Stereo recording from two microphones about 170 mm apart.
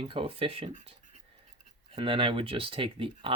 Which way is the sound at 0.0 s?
30° right (ahead or behind).